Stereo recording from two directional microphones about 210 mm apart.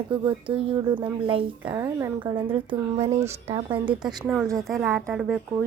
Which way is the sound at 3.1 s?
30° right (ahead or behind).